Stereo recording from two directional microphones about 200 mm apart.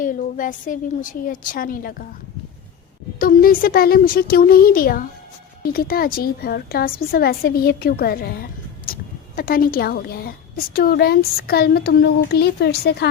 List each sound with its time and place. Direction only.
0.0 s a woman's voice: 40° left (ahead or behind)
3.2 s a woman's voice: 45° left (ahead or behind)